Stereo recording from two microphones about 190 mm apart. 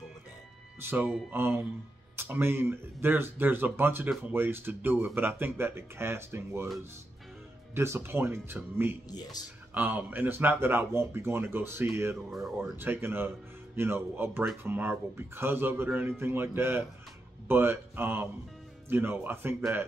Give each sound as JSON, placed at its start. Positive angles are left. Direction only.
{"t": 0.8, "sound": "speech", "side_deg": -10}
{"t": 7.7, "sound": "speech", "side_deg": -15}
{"t": 9.1, "sound": "speech", "side_deg": 20}
{"t": 9.8, "sound": "speech", "side_deg": -10}
{"t": 12.3, "sound": "speech", "side_deg": 0}